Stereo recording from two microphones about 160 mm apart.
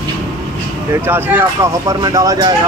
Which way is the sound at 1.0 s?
15° right (ahead or behind).